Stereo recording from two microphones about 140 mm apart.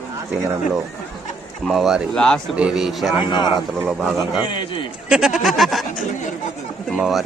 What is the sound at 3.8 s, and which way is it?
Speech, centre (ahead or behind).